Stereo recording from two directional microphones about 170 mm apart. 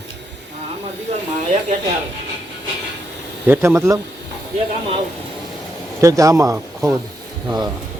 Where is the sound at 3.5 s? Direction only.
15° right (ahead or behind).